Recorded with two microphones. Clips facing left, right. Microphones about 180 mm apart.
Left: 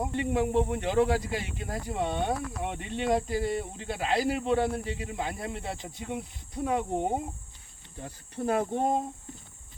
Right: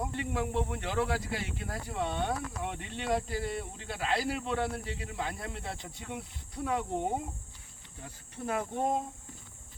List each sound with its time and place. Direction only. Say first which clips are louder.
0.0 s speech: left 6 dB; 20° left (ahead or behind)
8.0 s speech: left 7 dB; 35° left (ahead or behind)